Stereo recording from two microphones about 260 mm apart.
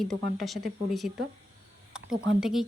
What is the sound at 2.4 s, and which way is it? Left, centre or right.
Speech, centre.